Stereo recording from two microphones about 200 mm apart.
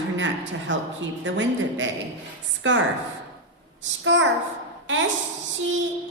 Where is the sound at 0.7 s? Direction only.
65° right (ahead or behind).